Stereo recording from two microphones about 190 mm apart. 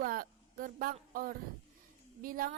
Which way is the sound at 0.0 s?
50° right (ahead or behind).